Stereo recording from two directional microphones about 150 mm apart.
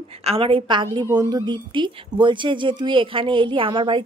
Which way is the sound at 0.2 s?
40° right (ahead or behind).